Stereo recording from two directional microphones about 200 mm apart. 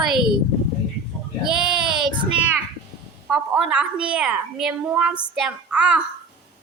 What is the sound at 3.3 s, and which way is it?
A woman's voice, 5° right (ahead or behind).